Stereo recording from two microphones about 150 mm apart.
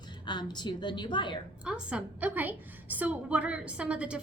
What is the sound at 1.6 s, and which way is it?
A woman's voice, 5° right (ahead or behind).